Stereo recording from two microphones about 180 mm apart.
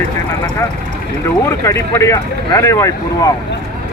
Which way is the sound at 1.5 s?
15° left (ahead or behind).